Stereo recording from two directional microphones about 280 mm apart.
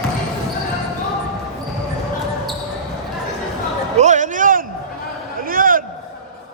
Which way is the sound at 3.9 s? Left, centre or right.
Right.